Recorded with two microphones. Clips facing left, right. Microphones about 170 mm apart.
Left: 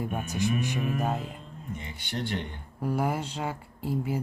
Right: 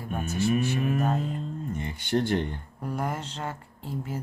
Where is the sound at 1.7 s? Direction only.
50° right (ahead or behind).